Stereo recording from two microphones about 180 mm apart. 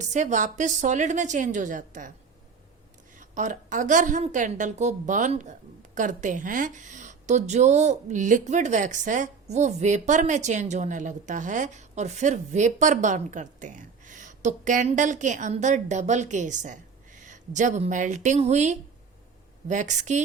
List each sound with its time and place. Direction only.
0.0 s a woman's voice: 40° right (ahead or behind)
3.2 s a woman's voice: 45° right (ahead or behind)